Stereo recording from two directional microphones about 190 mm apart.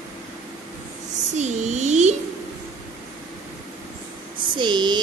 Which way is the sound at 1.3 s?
35° right (ahead or behind).